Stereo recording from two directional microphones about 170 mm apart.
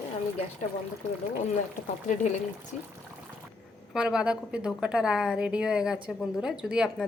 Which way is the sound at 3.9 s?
5° right (ahead or behind).